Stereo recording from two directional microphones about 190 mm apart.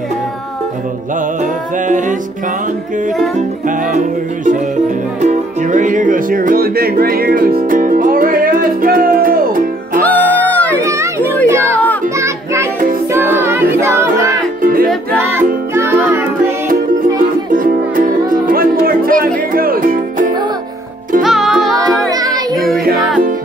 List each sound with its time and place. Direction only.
1.9 s music: 40° right (ahead or behind)
3.3 s music: 40° right (ahead or behind)
10.0 s music: 10° left (ahead or behind)
11.4 s speech: 15° right (ahead or behind)
13.1 s music: 10° right (ahead or behind)
14.6 s music: 50° right (ahead or behind)
15.7 s music: 10° right (ahead or behind)
17.2 s music: 45° right (ahead or behind)
21.2 s music: centre (ahead or behind)